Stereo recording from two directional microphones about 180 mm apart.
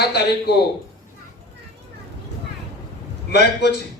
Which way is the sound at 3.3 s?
70° left (ahead or behind).